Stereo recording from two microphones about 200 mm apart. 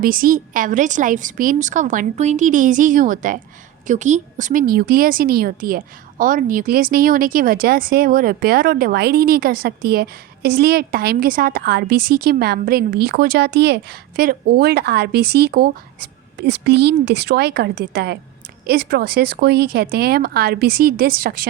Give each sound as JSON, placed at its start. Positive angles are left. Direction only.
{"t": 0.0, "sound": "a woman's voice", "side_deg": -45}